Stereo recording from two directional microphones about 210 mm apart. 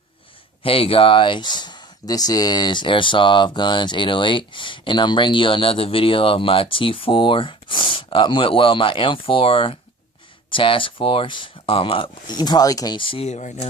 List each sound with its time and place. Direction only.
0.6 s speech: 25° left (ahead or behind)